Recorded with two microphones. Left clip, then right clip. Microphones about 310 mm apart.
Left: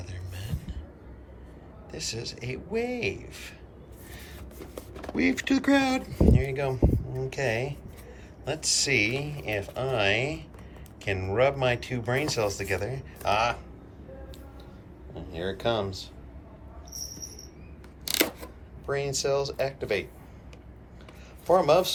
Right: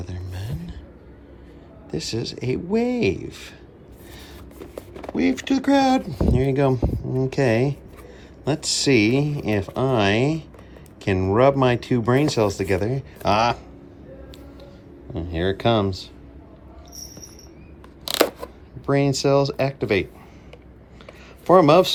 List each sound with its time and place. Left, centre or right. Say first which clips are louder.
0.0 s music: right 6 dB; centre
1.9 s speech: right 7 dB; centre
4.7 s speech: right 5 dB; centre
6.3 s speech: right 9 dB; centre
15.1 s speech: right 9 dB; right
18.1 s scissors: right 7 dB; centre
18.9 s speech: right 8 dB; right
21.5 s speech: right 7 dB; right